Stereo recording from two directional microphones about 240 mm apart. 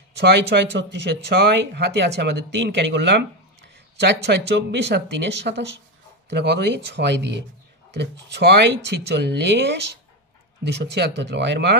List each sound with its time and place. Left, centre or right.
0.2 s speech: right